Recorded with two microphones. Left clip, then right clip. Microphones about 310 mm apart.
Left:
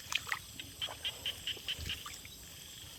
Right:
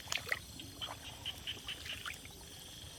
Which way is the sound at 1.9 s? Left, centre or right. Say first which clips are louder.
Left 3 dB; centre.